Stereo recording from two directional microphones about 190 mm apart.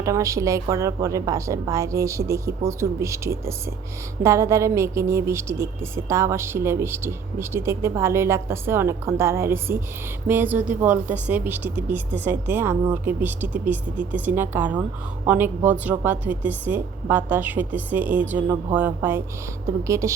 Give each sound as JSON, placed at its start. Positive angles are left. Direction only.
{"t": 0.0, "sound": "a woman's voice", "side_deg": -15}